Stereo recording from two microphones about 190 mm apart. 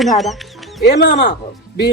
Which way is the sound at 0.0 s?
Centre (ahead or behind).